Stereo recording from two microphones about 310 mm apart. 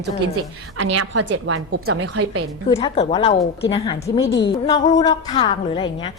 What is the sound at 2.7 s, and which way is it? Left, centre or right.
A woman's voice, centre.